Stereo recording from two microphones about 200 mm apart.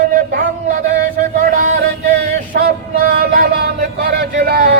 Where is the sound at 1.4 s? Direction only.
40° right (ahead or behind).